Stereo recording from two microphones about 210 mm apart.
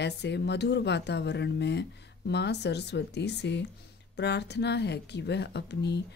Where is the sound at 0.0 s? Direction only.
55° left (ahead or behind).